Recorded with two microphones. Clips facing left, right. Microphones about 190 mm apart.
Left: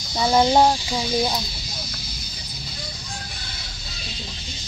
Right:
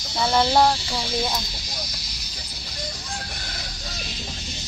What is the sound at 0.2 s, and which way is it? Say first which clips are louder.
Speech: left 2 dB; 15° left (ahead or behind).